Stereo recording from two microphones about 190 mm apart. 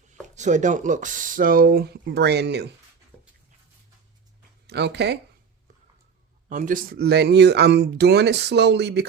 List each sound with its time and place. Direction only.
0.3 s speech: 40° right (ahead or behind); by 2.6 s 60° right (ahead or behind)
3.1 s a sound: 5° left (ahead or behind)
4.6 s speech: 60° right (ahead or behind)
6.5 s speech: 45° right (ahead or behind); by 9.0 s 60° right (ahead or behind)